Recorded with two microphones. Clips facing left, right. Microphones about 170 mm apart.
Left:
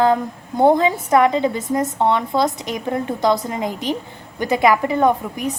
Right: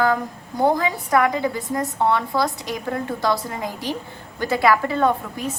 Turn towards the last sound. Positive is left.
turn(degrees=15)  # may be behind; listen again after turning